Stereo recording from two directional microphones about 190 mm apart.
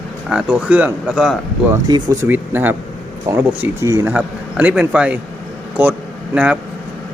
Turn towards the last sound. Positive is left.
turn(degrees=-5)  # may be behind; listen again after turning